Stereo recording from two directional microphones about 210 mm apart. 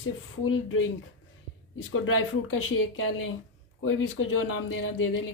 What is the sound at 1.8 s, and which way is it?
Speech, 75° left (ahead or behind).